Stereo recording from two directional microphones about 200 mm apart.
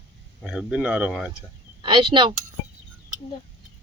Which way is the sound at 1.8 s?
25° right (ahead or behind).